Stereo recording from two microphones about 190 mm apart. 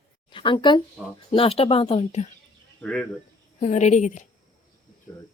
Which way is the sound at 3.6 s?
40° left (ahead or behind).